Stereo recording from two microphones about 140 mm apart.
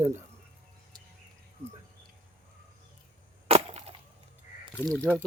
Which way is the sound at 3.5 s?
45° right (ahead or behind).